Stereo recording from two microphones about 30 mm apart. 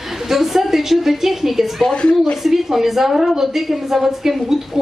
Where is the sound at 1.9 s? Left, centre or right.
Left.